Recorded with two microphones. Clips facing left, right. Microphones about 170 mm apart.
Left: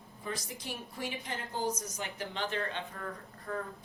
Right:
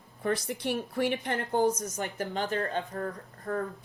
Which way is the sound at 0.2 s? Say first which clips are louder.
Right 10 dB; 65° right (ahead or behind).